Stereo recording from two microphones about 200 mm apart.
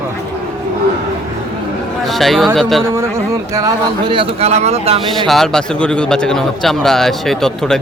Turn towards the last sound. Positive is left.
turn(degrees=0)  # may be behind; listen again after turning